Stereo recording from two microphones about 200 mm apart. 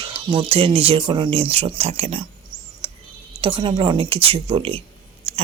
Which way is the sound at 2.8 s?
30° right (ahead or behind).